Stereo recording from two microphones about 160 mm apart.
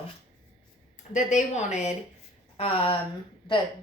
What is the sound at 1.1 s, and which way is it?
Speech, 50° left (ahead or behind).